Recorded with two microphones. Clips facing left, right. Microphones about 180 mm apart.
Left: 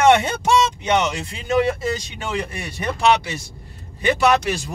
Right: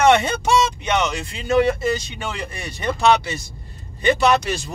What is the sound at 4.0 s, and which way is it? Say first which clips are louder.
Speech: even; 10° left (ahead or behind).